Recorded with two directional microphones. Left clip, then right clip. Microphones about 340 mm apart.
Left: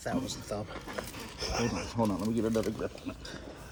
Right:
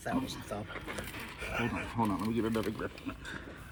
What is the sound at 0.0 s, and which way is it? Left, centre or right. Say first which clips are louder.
Speech: left 1 dB; left.